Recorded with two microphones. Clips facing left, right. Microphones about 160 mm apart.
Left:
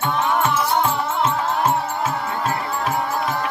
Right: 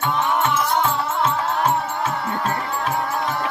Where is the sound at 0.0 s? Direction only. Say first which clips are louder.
Left 1 dB; 5° left (ahead or behind).